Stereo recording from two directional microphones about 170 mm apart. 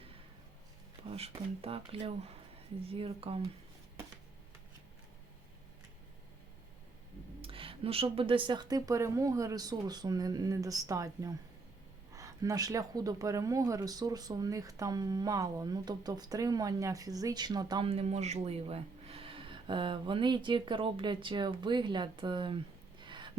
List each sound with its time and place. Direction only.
1.0 s a sound: 35° right (ahead or behind)
1.6 s speech: 35° right (ahead or behind)
7.4 s speech: 30° right (ahead or behind)